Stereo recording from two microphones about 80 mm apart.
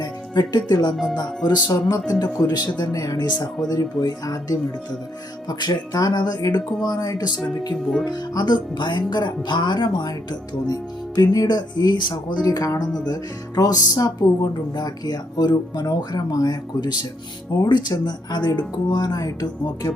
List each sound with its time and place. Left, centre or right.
0.0 s speech: left
5.5 s speech: left